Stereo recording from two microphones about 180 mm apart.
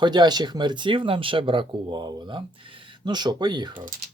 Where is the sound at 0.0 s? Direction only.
25° right (ahead or behind).